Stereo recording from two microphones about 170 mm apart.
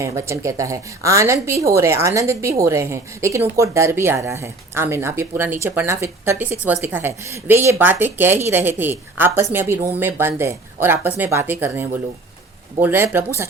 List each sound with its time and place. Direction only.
0.0 s a woman's voice: 15° right (ahead or behind)